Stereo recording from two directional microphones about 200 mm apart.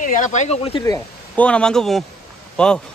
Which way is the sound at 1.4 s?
5° left (ahead or behind).